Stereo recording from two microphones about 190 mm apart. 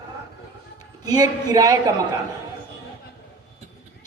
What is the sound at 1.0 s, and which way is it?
Speech, 20° right (ahead or behind).